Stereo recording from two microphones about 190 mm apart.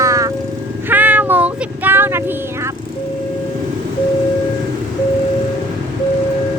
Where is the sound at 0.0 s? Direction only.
15° right (ahead or behind).